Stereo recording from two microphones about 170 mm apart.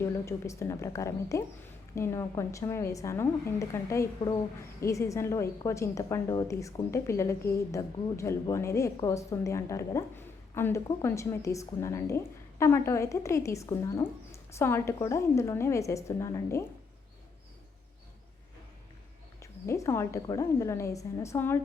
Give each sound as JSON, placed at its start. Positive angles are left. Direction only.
{"t": 0.0, "sound": "a woman's voice", "side_deg": 15}
{"t": 19.4, "sound": "a woman's voice", "side_deg": 15}